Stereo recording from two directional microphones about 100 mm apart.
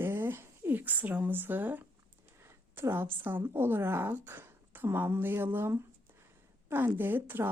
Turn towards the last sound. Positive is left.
turn(degrees=-20)  # may be behind; listen again after turning